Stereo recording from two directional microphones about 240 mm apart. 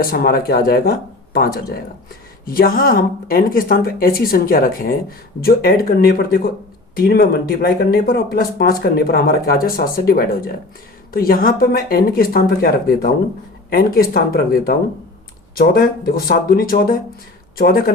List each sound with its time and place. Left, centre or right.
0.0 s speech: left